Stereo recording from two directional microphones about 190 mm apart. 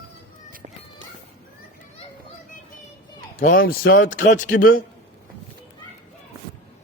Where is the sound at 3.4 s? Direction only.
50° left (ahead or behind).